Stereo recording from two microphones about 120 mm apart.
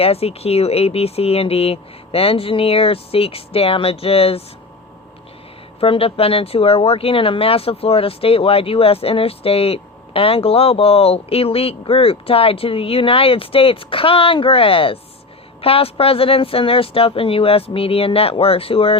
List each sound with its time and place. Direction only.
0.0 s speech: 55° left (ahead or behind)
5.8 s speech: 50° left (ahead or behind)